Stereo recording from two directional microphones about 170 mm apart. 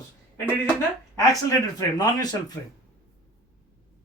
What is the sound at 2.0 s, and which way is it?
Speech, 20° left (ahead or behind).